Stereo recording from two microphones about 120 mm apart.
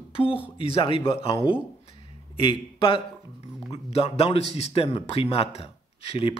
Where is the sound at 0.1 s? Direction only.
50° left (ahead or behind).